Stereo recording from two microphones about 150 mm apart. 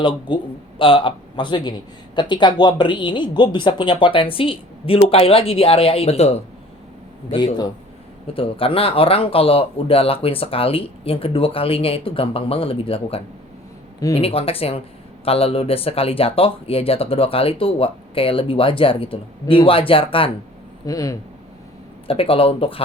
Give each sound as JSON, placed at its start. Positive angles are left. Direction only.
{"t": 0.0, "sound": "speech", "side_deg": 35}
{"t": 7.3, "sound": "speech", "side_deg": 30}
{"t": 20.8, "sound": "speech", "side_deg": 25}
{"t": 22.0, "sound": "speech", "side_deg": 40}